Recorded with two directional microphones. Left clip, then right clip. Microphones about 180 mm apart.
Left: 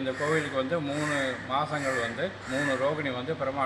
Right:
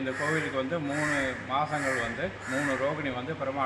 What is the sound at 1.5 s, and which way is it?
Speech, 10° left (ahead or behind).